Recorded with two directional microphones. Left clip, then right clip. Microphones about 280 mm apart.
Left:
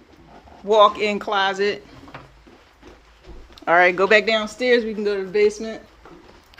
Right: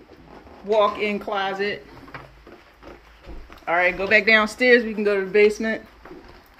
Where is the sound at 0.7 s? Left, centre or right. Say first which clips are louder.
Left 5 dB; centre.